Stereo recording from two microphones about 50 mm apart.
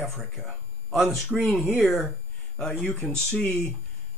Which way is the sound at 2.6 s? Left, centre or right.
Centre.